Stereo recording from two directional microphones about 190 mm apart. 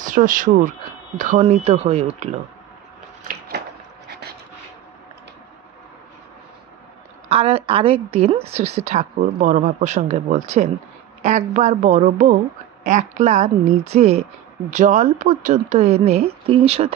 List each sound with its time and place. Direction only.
0.0 s a woman's voice: 45° right (ahead or behind)
3.3 s a sound: 50° right (ahead or behind)
4.1 s vehicle: 55° right (ahead or behind)
7.2 s a woman's voice: 30° right (ahead or behind)